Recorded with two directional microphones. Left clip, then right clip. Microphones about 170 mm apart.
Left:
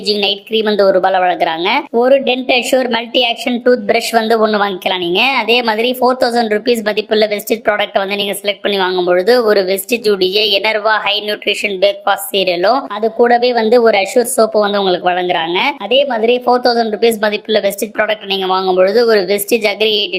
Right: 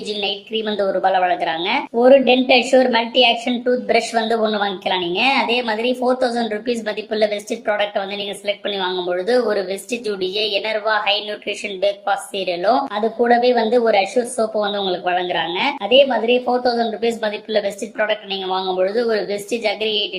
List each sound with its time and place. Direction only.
0.1 s a woman's voice: 40° left (ahead or behind)